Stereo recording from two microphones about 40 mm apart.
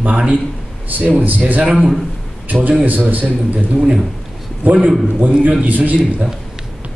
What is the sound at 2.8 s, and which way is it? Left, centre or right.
Speech, right.